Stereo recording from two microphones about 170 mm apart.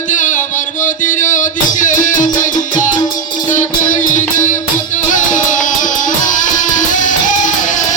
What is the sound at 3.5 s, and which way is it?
Music, 50° left (ahead or behind).